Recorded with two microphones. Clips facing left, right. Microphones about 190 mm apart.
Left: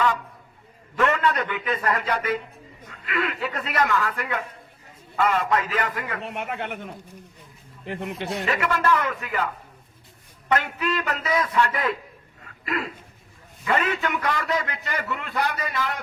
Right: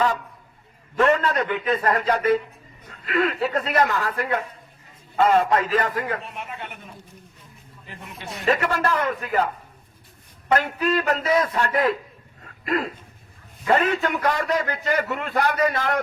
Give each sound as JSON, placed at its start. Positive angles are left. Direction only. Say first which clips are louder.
{"t": 0.9, "sound": "a man's voice", "louder": "right 3 dB", "side_deg": -35}
{"t": 5.8, "sound": "a man's voice", "louder": "right 4 dB", "side_deg": -45}
{"t": 6.2, "sound": "speech", "louder": "left 5 dB", "side_deg": 70}
{"t": 8.4, "sound": "a man's voice", "louder": "right 2 dB", "side_deg": -35}
{"t": 10.5, "sound": "a man's voice", "louder": "right 3 dB", "side_deg": -35}
{"t": 11.7, "sound": "a man's voice", "louder": "right 5 dB", "side_deg": -30}